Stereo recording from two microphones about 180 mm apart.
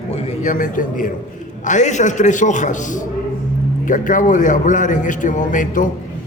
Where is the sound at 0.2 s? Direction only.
35° left (ahead or behind).